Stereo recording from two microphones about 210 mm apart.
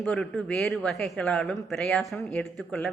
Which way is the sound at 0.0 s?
5° left (ahead or behind).